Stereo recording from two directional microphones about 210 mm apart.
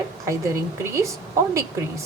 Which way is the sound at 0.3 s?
15° right (ahead or behind).